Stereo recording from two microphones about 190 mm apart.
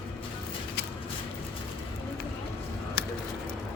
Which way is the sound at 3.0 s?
60° left (ahead or behind).